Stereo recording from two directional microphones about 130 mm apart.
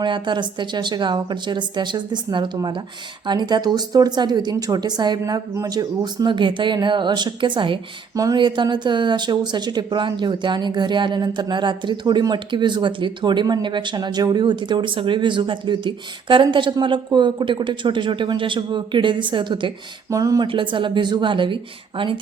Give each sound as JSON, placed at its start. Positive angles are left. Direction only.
{"t": 0.0, "sound": "speech", "side_deg": -35}
{"t": 20.1, "sound": "speech", "side_deg": -25}
{"t": 20.5, "sound": "speech", "side_deg": -40}